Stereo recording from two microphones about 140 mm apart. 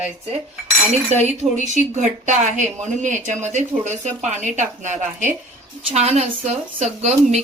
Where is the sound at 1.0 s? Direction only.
55° right (ahead or behind).